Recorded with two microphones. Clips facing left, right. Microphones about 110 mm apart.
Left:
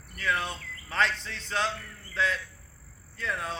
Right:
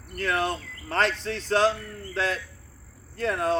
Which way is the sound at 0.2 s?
50° right (ahead or behind).